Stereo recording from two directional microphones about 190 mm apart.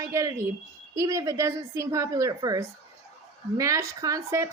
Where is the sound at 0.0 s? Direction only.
15° right (ahead or behind).